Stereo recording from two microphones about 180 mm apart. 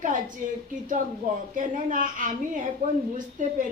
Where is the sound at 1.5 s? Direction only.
45° right (ahead or behind).